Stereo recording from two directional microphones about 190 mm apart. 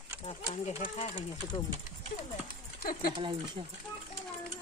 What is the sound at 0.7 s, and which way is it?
Speech, 35° left (ahead or behind).